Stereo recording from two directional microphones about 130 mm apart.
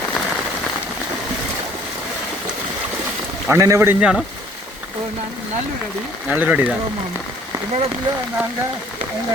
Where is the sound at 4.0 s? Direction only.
5° right (ahead or behind).